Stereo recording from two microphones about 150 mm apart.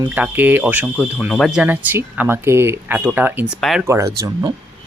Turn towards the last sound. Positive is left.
turn(degrees=-20)  # may be behind; listen again after turning